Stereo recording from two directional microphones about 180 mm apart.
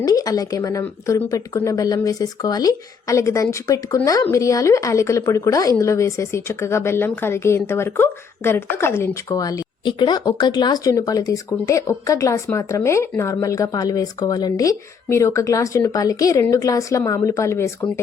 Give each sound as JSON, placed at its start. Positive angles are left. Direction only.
{"t": 0.0, "sound": "speech", "side_deg": 20}